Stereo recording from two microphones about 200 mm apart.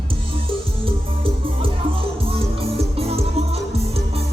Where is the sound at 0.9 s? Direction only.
25° right (ahead or behind).